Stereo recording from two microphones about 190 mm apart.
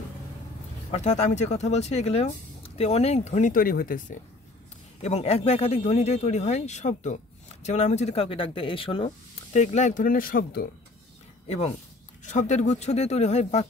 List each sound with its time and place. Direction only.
0.9 s speech: 35° left (ahead or behind)
5.0 s speech: 35° left (ahead or behind); by 10.7 s 50° left (ahead or behind)
11.4 s speech: 35° left (ahead or behind)